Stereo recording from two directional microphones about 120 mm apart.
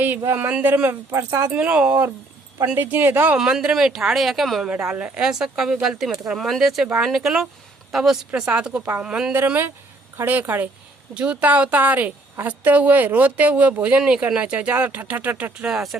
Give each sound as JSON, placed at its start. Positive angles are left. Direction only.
{"t": 0.3, "sound": "a woman's voice", "side_deg": -10}
{"t": 9.4, "sound": "a woman's voice", "side_deg": -15}